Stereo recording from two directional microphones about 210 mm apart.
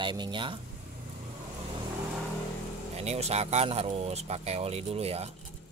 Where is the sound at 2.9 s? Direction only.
30° right (ahead or behind).